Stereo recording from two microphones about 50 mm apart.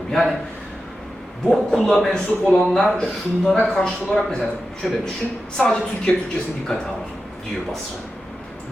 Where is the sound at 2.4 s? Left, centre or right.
Centre.